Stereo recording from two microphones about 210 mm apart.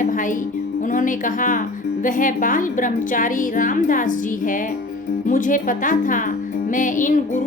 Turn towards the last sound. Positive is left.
turn(degrees=40)  # may be behind; listen again after turning